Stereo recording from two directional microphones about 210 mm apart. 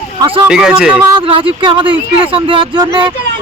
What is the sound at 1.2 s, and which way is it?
Speech, 25° right (ahead or behind).